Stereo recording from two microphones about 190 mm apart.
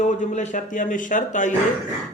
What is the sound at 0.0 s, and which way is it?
A man's voice, 40° left (ahead or behind).